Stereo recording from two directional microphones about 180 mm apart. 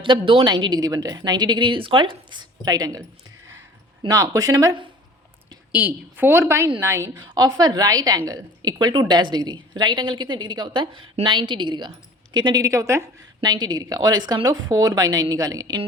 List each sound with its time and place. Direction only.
0.0 s a woman's voice: 30° right (ahead or behind)
4.0 s a woman's voice: 20° right (ahead or behind)
5.7 s a woman's voice: 10° right (ahead or behind)